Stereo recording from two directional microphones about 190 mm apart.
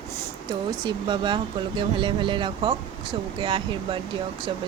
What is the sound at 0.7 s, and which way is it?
Speech, 25° right (ahead or behind).